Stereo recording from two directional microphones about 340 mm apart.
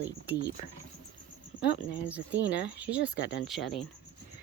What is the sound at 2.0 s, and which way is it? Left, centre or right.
Speech, centre.